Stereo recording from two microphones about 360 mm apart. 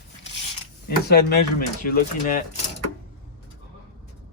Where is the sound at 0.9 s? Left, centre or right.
Left.